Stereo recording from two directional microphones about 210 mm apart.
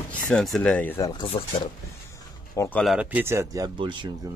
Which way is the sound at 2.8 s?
5° right (ahead or behind).